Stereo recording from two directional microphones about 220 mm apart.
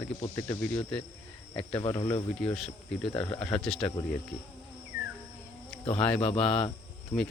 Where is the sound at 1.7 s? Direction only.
20° left (ahead or behind); by 3.9 s 5° left (ahead or behind).